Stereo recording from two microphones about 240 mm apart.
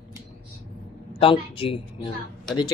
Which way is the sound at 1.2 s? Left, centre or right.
Left.